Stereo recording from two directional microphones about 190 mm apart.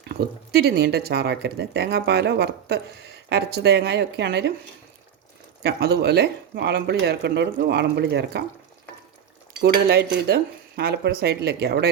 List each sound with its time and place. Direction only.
0.1 s speech: 55° right (ahead or behind)
5.6 s speech: 60° right (ahead or behind)
9.5 s speech: 60° right (ahead or behind)